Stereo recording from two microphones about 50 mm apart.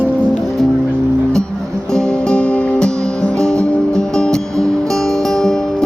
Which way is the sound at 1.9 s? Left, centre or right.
Centre.